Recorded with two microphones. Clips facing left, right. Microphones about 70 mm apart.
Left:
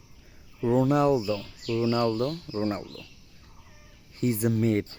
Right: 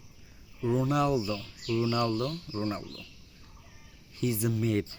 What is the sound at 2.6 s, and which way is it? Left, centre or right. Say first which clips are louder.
Speech: left 4 dB; left.